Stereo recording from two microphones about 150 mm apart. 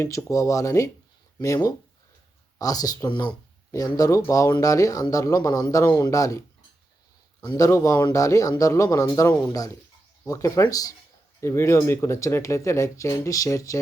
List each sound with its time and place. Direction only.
0.3 s speech: 20° left (ahead or behind)
7.5 s speech: 20° left (ahead or behind)